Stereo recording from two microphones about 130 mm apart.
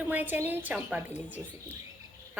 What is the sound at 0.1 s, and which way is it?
A woman's voice, 15° right (ahead or behind).